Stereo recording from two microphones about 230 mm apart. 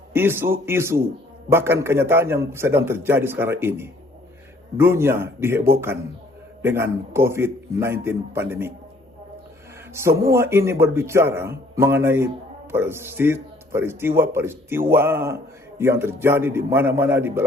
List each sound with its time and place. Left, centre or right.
0.1 s speech: centre
9.9 s speech: centre